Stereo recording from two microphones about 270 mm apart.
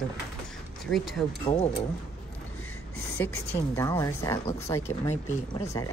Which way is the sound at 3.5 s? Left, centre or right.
Centre.